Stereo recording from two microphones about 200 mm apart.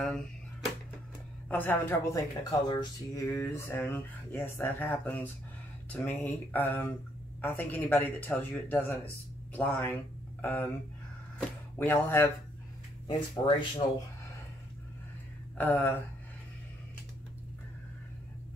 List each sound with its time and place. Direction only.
1.5 s speech: 10° left (ahead or behind)
13.6 s speech: 25° left (ahead or behind)
15.5 s speech: 10° left (ahead or behind)